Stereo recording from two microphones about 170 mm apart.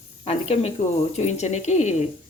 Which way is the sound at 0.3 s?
35° left (ahead or behind).